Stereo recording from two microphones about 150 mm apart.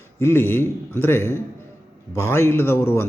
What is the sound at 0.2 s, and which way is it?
A man's voice, 15° left (ahead or behind).